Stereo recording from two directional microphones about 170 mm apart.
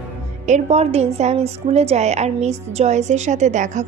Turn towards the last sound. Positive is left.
turn(degrees=-45)  # may be behind; listen again after turning